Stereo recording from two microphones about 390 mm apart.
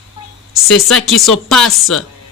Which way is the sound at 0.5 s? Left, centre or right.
Centre.